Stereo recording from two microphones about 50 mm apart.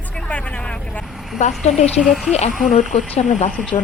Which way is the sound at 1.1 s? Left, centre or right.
Centre.